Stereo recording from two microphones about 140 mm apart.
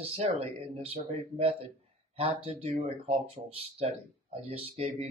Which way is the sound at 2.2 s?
40° right (ahead or behind).